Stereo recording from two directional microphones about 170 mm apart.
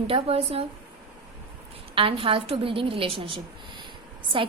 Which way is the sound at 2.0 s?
30° right (ahead or behind).